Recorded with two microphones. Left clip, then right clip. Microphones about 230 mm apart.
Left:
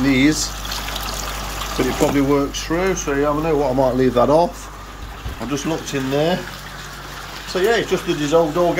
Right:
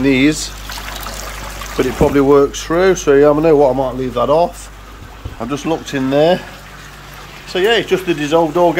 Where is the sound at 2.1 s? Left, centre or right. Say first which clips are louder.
Right 8 dB; right.